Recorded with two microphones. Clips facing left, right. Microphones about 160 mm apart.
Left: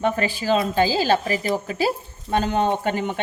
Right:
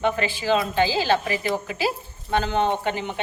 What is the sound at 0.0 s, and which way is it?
A woman's voice, 40° left (ahead or behind).